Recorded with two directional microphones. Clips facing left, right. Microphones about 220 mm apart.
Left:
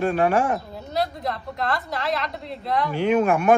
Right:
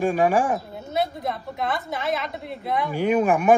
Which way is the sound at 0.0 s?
15° right (ahead or behind).